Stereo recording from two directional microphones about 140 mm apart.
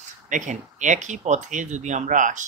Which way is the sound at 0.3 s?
60° right (ahead or behind).